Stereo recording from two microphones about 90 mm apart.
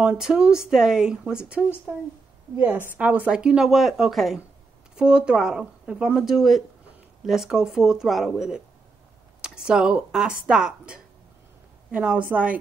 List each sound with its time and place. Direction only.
0.0 s a woman's voice: 10° right (ahead or behind)